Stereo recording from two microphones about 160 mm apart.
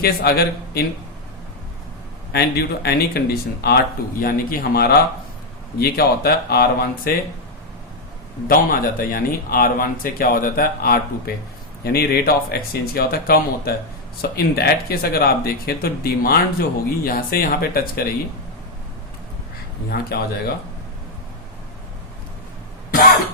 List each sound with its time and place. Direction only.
0.0 s speech: 75° left (ahead or behind)
2.3 s speech: 85° left
4.2 s speech: 65° left (ahead or behind)
8.4 s speech: 65° left (ahead or behind)
11.8 s speech: 80° left
19.9 s speech: 75° left (ahead or behind)